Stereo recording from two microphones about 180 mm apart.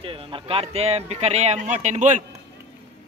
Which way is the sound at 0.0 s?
30° right (ahead or behind).